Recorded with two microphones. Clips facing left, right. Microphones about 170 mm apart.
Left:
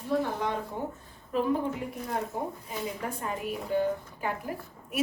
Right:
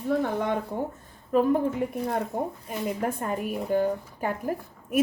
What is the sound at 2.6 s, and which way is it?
A woman's voice, 55° right (ahead or behind).